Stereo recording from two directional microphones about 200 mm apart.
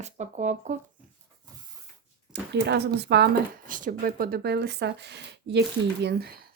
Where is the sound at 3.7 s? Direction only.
40° right (ahead or behind).